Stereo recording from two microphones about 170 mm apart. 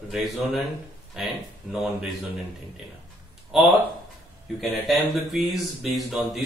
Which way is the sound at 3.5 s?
5° right (ahead or behind).